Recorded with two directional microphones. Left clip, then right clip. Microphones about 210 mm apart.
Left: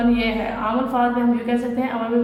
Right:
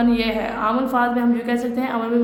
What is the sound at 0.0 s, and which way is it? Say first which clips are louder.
A woman's voice: even; 50° right (ahead or behind).